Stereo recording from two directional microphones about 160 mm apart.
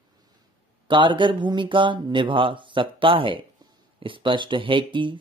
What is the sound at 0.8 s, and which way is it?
Speech, 30° right (ahead or behind).